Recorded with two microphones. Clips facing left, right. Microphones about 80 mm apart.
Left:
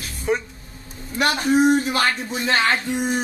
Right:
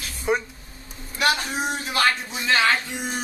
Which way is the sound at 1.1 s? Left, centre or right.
Left.